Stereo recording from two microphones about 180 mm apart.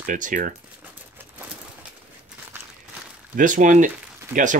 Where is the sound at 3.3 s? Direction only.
45° right (ahead or behind).